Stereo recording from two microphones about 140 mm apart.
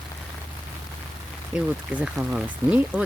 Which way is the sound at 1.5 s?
5° right (ahead or behind).